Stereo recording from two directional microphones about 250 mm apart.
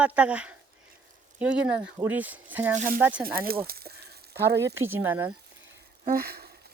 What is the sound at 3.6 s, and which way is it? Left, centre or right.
Sizzle, right.